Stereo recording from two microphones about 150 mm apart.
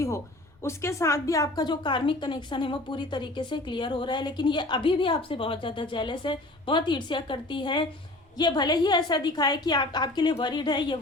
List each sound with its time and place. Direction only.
0.6 s a woman's voice: 20° left (ahead or behind)